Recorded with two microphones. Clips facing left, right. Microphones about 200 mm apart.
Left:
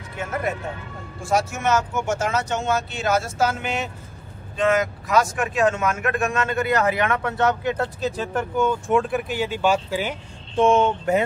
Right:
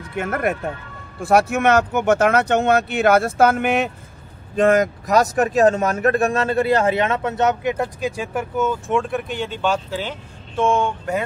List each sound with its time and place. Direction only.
0.2 s speech: 60° right (ahead or behind)
4.6 s speech: 45° right (ahead or behind); by 11.2 s 20° left (ahead or behind)